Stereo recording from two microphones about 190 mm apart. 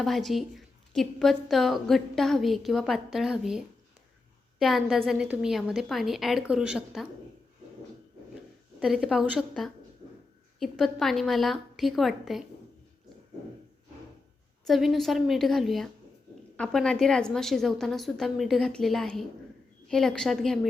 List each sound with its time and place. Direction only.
0.0 s a woman's voice: centre (ahead or behind)
4.6 s a woman's voice: centre (ahead or behind)
8.8 s a woman's voice: centre (ahead or behind)
14.6 s a woman's voice: centre (ahead or behind)